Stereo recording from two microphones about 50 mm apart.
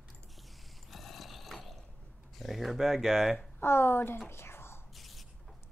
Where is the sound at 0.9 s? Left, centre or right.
Centre.